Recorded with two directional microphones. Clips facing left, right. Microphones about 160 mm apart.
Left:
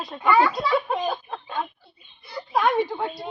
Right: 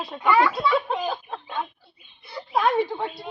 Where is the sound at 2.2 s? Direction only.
Centre (ahead or behind).